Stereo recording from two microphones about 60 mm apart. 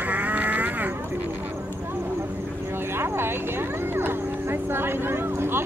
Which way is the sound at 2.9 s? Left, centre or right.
Right.